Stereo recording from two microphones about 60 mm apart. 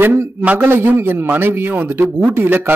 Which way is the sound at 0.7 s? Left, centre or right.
Right.